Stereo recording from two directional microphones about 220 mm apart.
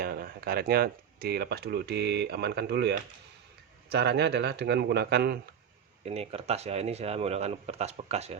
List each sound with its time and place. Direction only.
0.0 s speech: 45° right (ahead or behind)
6.1 s speech: 30° right (ahead or behind)